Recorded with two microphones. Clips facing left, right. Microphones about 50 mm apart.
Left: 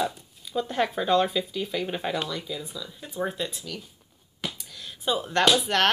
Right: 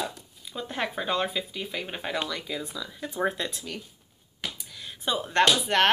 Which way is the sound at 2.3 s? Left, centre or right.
Right.